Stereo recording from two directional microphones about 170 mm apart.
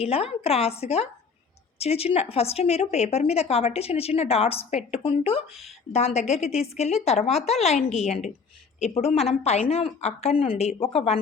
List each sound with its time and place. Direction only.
0.0 s a woman's voice: 35° left (ahead or behind)